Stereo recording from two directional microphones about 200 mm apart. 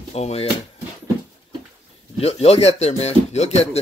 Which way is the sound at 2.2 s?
30° left (ahead or behind).